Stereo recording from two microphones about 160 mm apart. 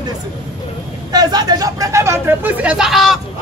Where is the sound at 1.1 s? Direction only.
25° right (ahead or behind).